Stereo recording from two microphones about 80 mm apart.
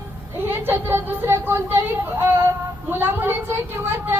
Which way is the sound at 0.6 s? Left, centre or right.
Right.